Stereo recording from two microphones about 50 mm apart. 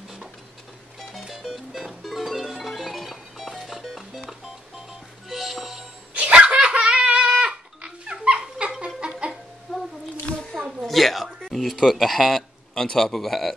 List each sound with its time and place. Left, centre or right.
1.1 s music: centre
6.1 s dog: right
9.3 s a sound: centre
11.4 s speech: centre
12.7 s speech: centre